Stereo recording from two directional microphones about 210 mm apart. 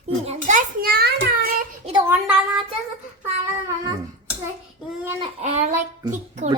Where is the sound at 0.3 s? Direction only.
35° right (ahead or behind).